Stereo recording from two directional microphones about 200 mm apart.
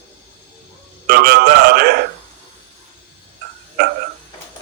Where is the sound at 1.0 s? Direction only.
55° right (ahead or behind).